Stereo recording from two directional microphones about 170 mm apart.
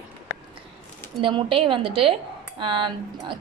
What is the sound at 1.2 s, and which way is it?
A woman's voice, 30° right (ahead or behind).